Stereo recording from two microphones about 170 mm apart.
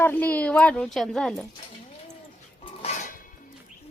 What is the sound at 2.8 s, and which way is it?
Music, 45° left (ahead or behind).